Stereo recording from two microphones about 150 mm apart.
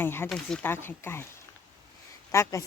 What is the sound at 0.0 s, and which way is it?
Speech, 15° left (ahead or behind).